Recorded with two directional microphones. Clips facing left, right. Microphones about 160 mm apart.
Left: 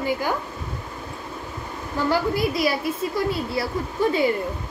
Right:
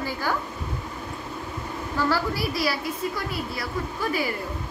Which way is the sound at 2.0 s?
20° left (ahead or behind).